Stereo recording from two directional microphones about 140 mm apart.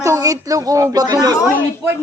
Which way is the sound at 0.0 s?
25° right (ahead or behind).